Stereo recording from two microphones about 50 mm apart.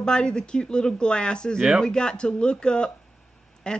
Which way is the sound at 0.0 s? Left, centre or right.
Centre.